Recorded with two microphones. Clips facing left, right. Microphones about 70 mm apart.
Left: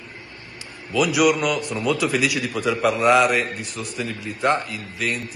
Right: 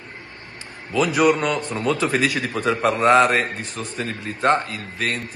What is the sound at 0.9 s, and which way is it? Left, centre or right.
A man's voice, right.